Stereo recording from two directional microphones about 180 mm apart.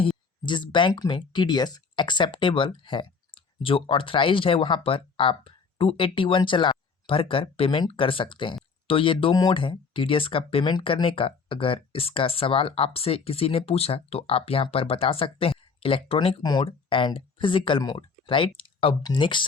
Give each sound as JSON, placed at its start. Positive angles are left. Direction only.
{"t": 0.4, "sound": "speech", "side_deg": 25}